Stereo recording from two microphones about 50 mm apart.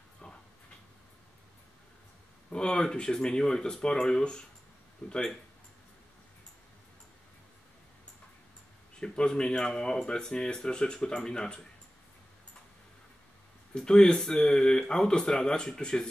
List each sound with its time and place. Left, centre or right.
2.5 s speech: centre
9.0 s speech: centre
13.7 s speech: centre